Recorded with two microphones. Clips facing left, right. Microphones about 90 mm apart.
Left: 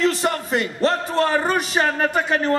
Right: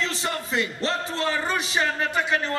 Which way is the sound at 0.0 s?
55° left (ahead or behind).